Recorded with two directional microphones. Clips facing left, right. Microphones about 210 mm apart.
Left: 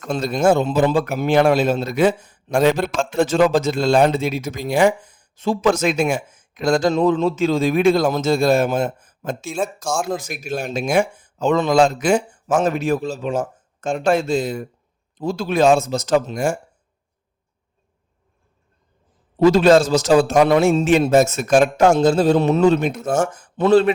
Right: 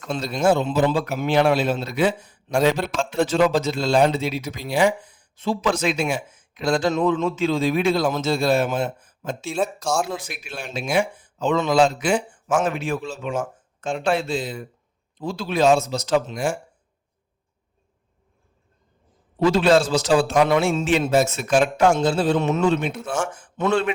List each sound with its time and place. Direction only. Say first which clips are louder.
0.0 s a man's voice: left 3 dB; 50° left (ahead or behind)
19.4 s a man's voice: left 5 dB; 40° left (ahead or behind)